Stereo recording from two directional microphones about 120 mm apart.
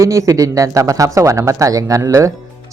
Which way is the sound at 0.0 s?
25° right (ahead or behind).